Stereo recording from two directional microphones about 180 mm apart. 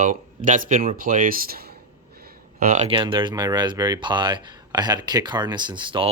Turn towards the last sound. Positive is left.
turn(degrees=-25)  # may be behind; listen again after turning